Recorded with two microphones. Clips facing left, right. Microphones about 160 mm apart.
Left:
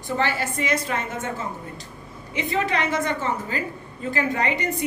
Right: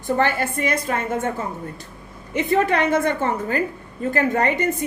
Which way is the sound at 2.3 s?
55° right (ahead or behind).